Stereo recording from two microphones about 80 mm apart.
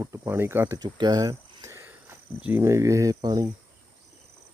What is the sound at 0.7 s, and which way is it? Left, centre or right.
Speech, right.